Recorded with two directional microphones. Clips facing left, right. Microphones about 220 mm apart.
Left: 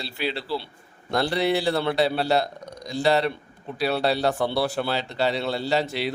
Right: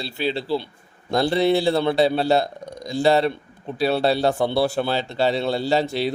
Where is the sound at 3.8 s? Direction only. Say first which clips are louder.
Right 3 dB; 30° right (ahead or behind).